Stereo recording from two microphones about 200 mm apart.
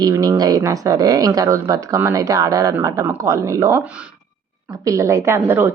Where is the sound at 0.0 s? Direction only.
15° right (ahead or behind).